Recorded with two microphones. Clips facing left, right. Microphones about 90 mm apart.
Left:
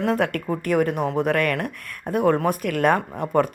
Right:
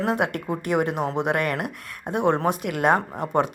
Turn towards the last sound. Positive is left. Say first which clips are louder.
# left 1 dB
turn(degrees=-25)  # may be behind; listen again after turning